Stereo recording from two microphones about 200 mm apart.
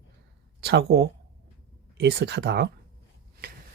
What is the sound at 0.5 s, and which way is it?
Speech, 55° right (ahead or behind).